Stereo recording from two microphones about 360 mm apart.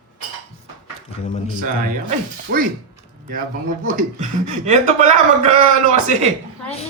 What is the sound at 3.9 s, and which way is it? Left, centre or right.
Speech, centre.